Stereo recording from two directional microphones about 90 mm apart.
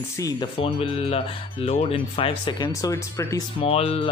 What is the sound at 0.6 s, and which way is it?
Speech, 90° left.